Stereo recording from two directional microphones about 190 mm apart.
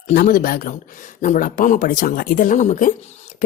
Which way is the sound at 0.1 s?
45° left (ahead or behind).